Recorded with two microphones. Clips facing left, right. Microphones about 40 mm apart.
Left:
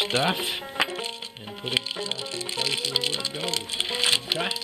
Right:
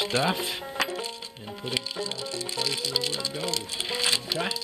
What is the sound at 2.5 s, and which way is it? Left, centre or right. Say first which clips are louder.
Music: left 3 dB; left.